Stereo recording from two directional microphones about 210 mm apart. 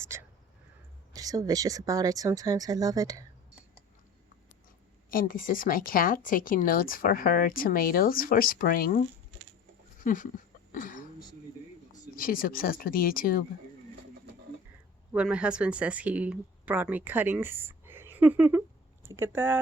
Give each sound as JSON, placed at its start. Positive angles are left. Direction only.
{"t": 0.0, "sound": "a sound", "side_deg": -15}
{"t": 1.1, "sound": "speech", "side_deg": -15}
{"t": 5.0, "sound": "a woman's voice", "side_deg": 40}
{"t": 10.0, "sound": "a sound", "side_deg": 40}
{"t": 12.1, "sound": "a woman's voice", "side_deg": 40}
{"t": 15.1, "sound": "speech", "side_deg": -5}